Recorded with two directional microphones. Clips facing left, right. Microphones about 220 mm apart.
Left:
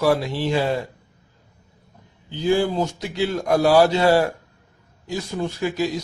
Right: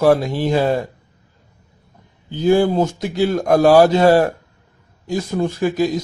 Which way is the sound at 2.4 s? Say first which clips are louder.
Right 5 dB; 45° right (ahead or behind).